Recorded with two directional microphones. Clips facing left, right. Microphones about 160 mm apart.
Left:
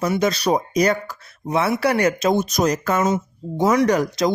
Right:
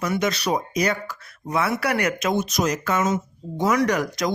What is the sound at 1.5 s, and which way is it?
Speech, 25° left (ahead or behind).